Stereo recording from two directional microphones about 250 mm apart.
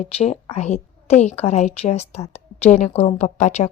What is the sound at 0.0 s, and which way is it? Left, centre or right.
A woman's voice, left.